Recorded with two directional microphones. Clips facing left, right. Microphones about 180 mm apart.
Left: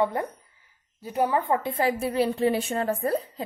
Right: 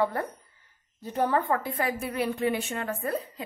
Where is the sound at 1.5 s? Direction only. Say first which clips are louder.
Left 4 dB; 25° left (ahead or behind).